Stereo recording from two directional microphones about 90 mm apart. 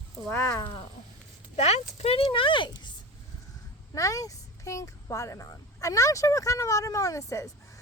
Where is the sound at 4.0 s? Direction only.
35° left (ahead or behind).